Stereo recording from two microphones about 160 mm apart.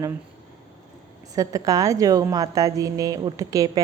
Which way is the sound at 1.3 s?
20° right (ahead or behind).